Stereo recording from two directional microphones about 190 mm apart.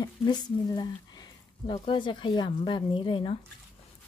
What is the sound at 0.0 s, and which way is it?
Speech, 20° left (ahead or behind).